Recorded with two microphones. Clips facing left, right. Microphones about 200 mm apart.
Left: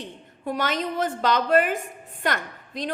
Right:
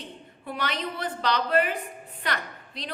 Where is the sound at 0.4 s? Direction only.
45° left (ahead or behind).